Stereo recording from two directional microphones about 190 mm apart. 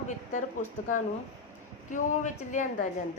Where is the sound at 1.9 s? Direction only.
40° left (ahead or behind).